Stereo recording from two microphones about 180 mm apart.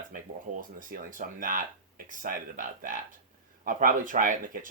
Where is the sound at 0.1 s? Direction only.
50° right (ahead or behind).